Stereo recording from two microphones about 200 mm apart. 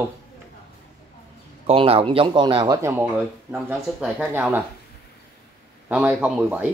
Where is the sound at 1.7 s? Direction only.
30° right (ahead or behind); by 4.6 s 10° right (ahead or behind).